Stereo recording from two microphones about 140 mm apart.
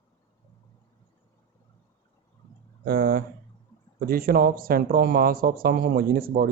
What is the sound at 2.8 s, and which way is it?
Speech, 90° right.